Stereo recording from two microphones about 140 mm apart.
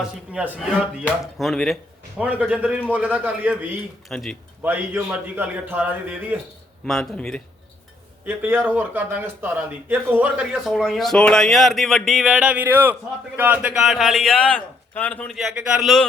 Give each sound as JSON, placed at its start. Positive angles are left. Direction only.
{"t": 0.0, "sound": "speech", "side_deg": -5}
{"t": 2.2, "sound": "a man's voice", "side_deg": -10}
{"t": 4.1, "sound": "speech", "side_deg": 5}
{"t": 4.6, "sound": "a man's voice", "side_deg": -15}
{"t": 6.8, "sound": "speech", "side_deg": 5}
{"t": 8.3, "sound": "speech", "side_deg": -15}